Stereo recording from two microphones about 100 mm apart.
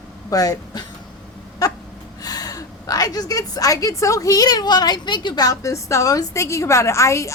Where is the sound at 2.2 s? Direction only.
40° left (ahead or behind).